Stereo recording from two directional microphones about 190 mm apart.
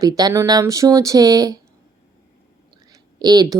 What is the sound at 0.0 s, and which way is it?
A woman's voice, 20° right (ahead or behind).